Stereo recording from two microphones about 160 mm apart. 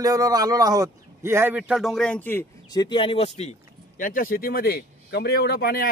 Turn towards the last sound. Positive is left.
turn(degrees=75)  # may be behind; listen again after turning